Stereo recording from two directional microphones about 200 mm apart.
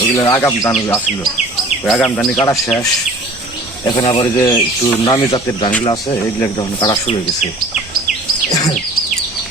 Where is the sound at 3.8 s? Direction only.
25° left (ahead or behind).